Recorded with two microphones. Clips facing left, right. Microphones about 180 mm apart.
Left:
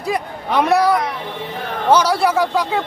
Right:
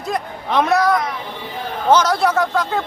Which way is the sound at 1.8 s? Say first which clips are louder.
Even; 10° left (ahead or behind).